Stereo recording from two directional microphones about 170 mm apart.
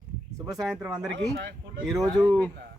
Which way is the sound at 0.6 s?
5° right (ahead or behind).